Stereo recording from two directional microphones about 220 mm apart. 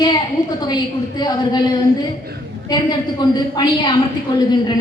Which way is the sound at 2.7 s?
20° left (ahead or behind).